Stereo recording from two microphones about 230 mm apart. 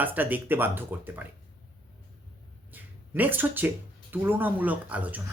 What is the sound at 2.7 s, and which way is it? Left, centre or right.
Speech, centre.